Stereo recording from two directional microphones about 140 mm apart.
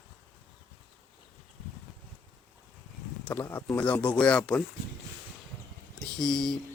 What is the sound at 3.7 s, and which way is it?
Speech, 10° left (ahead or behind).